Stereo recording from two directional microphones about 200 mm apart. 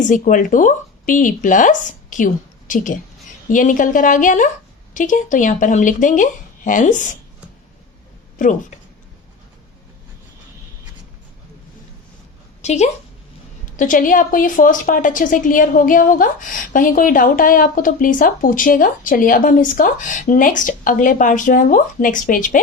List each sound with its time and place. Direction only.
0.0 s a woman's voice: 40° left (ahead or behind)
12.6 s a woman's voice: 35° left (ahead or behind)